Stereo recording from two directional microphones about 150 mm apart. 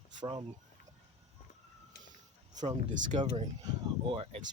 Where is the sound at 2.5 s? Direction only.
55° right (ahead or behind).